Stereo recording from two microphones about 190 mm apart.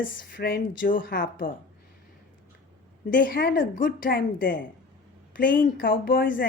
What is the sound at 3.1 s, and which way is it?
Speech, 45° left (ahead or behind).